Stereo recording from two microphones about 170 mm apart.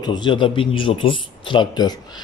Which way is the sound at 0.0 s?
25° left (ahead or behind).